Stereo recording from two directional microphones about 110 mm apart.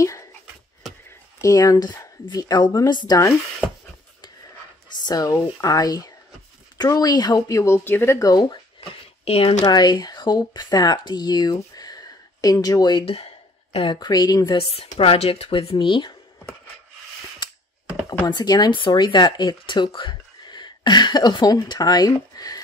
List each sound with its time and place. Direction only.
0.0 s a sound: 30° left (ahead or behind)
1.4 s speech: 30° left (ahead or behind)
5.0 s speech: 35° left (ahead or behind)
9.2 s speech: 60° left (ahead or behind)
9.7 s speech: 40° left (ahead or behind)
13.0 s a sound: 60° left (ahead or behind)
13.9 s speech: 40° left (ahead or behind)
14.6 s speech: 60° left (ahead or behind); by 16.2 s 45° left (ahead or behind)
18.2 s speech: 40° left (ahead or behind)